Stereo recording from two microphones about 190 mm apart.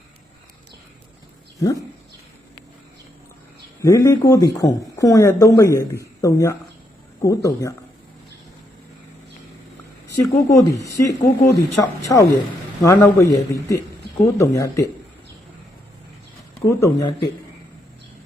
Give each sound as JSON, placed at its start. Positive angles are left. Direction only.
{"t": 1.5, "sound": "speech", "side_deg": 15}
{"t": 3.8, "sound": "speech", "side_deg": 15}
{"t": 10.2, "sound": "speech", "side_deg": 15}
{"t": 16.6, "sound": "speech", "side_deg": 15}